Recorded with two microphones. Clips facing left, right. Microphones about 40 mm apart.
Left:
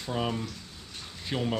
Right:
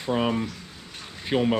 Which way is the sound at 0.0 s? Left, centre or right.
Right.